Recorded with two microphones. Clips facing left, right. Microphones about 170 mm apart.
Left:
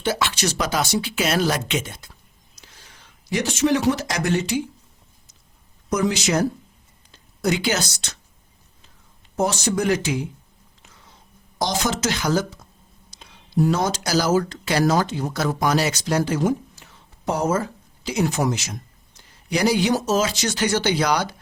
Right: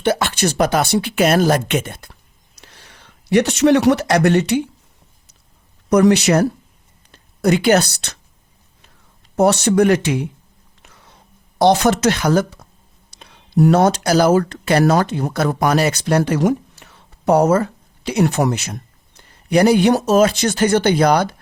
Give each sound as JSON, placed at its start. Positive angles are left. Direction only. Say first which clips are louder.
{"t": 0.0, "sound": "a man's voice", "louder": "right 6 dB", "side_deg": -55}
{"t": 5.9, "sound": "a woman's voice", "louder": "right 9 dB", "side_deg": -65}
{"t": 9.3, "sound": "speech", "louder": "right 8 dB", "side_deg": -65}
{"t": 10.8, "sound": "a sound", "louder": "right 4 dB", "side_deg": -65}
{"t": 11.5, "sound": "speech", "louder": "right 10 dB", "side_deg": -65}